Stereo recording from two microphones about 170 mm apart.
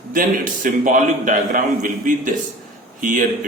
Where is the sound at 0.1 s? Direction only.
50° right (ahead or behind).